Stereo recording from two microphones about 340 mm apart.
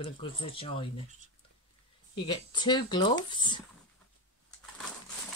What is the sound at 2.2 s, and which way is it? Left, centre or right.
Speech, centre.